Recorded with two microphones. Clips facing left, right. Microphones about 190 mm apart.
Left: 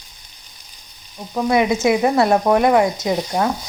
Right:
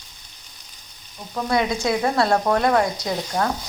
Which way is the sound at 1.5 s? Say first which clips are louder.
Left 5 dB; 15° left (ahead or behind).